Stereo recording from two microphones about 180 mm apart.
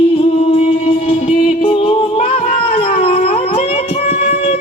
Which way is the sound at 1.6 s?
30° left (ahead or behind).